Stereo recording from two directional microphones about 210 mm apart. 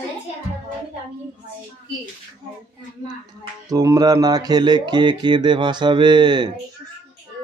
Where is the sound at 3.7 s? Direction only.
15° right (ahead or behind).